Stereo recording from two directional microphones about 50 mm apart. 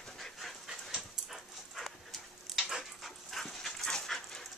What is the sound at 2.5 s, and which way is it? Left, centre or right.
Dog, centre.